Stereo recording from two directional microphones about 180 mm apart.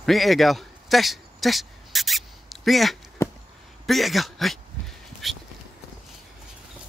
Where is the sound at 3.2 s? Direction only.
15° left (ahead or behind).